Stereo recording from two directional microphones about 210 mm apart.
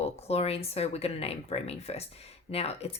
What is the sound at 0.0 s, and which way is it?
Speech, 30° left (ahead or behind).